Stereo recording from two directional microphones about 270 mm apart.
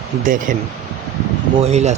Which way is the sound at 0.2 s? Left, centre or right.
Right.